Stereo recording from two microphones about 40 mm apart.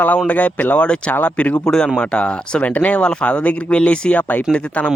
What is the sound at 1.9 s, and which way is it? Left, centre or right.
Speech, left.